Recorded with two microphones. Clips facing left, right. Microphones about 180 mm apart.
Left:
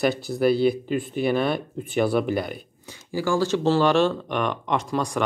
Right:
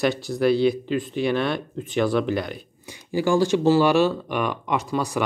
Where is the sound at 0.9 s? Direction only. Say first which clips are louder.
Even; 10° left (ahead or behind).